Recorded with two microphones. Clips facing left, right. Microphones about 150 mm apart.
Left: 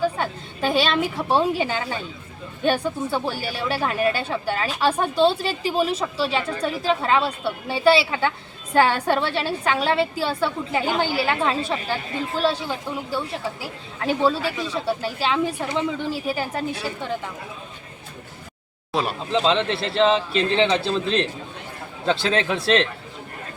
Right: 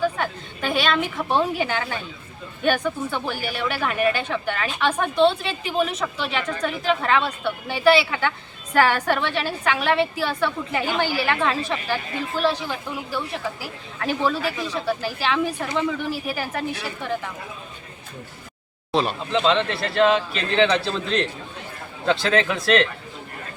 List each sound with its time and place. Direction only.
0.0 s a woman's voice: 30° left (ahead or behind)
14.4 s a man's voice: centre (ahead or behind)
14.8 s a woman's voice: 30° left (ahead or behind)
19.3 s a woman's voice: 35° left (ahead or behind)